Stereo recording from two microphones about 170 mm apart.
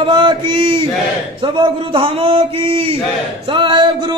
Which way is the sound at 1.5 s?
30° right (ahead or behind).